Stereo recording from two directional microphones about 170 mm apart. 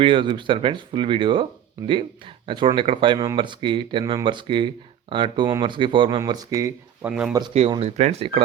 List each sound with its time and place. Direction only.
0.0 s speech: 30° right (ahead or behind)
2.5 s speech: 30° right (ahead or behind)
7.1 s speech: 5° right (ahead or behind)
7.5 s speech: 35° right (ahead or behind)